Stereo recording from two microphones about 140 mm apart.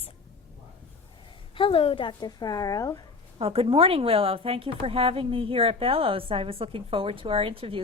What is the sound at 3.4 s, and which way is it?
Speech, 45° right (ahead or behind).